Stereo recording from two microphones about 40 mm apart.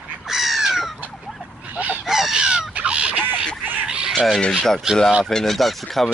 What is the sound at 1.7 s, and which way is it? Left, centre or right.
Fowl, right.